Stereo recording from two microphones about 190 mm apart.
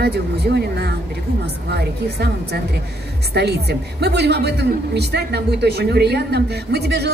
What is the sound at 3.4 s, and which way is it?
A woman's voice, 60° right (ahead or behind).